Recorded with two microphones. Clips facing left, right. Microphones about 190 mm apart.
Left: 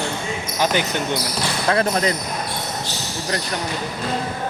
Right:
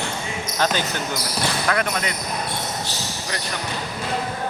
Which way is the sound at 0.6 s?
15° left (ahead or behind).